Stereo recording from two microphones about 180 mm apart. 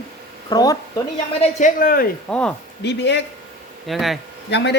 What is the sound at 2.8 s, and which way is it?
Speech, 75° left (ahead or behind).